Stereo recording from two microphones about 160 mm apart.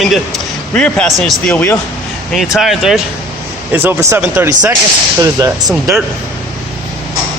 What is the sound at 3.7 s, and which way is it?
Speech, 15° right (ahead or behind).